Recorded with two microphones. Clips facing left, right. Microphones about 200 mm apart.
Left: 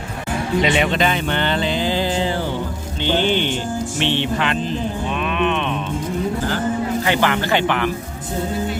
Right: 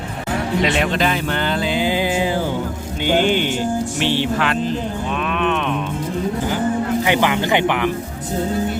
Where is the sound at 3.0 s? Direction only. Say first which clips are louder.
Right 2 dB; 10° right (ahead or behind).